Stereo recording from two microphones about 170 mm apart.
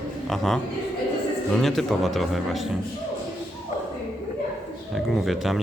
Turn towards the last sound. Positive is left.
turn(degrees=0)  # may be behind; listen again after turning